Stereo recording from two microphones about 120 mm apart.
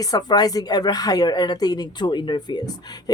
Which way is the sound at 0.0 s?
35° left (ahead or behind).